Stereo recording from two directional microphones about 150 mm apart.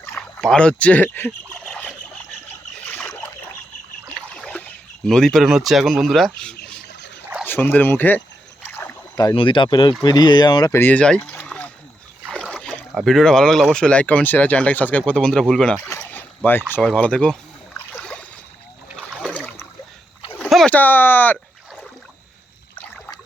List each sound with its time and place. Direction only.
0.0 s rowboat: 15° left (ahead or behind)
0.4 s speech: 5° left (ahead or behind)
2.9 s boat: 10° left (ahead or behind)
4.3 s speech: 10° left (ahead or behind)
8.6 s rowboat: 15° left (ahead or behind)
9.1 s speech: 30° left (ahead or behind); by 17.3 s 5° left (ahead or behind)
17.9 s boat: 10° left (ahead or behind)
20.4 s speech: 5° left (ahead or behind)